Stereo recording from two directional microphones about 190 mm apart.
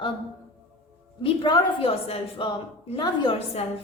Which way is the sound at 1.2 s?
30° left (ahead or behind).